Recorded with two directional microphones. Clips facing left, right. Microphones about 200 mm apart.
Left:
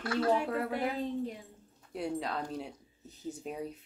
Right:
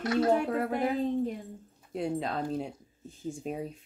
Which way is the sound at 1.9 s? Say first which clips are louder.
Right 3 dB; 25° right (ahead or behind).